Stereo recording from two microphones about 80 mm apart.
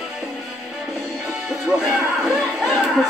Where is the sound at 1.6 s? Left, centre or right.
Centre.